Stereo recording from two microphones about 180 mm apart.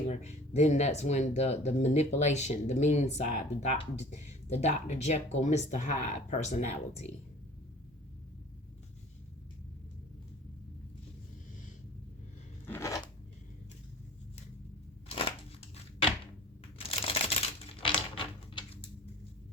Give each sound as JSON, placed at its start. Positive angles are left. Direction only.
{"t": 0.1, "sound": "speech", "side_deg": 40}
{"t": 12.6, "sound": "scissors", "side_deg": 15}
{"t": 16.7, "sound": "typewriter", "side_deg": 30}